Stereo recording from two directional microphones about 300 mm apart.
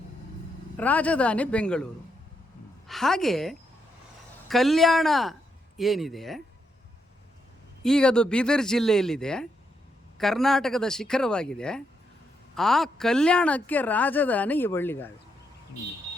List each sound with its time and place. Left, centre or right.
0.8 s speech: centre
7.9 s speech: centre